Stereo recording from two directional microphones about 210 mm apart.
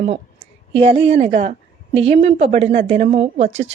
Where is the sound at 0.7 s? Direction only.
25° right (ahead or behind).